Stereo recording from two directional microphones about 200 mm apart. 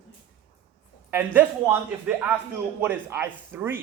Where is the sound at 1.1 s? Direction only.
10° right (ahead or behind).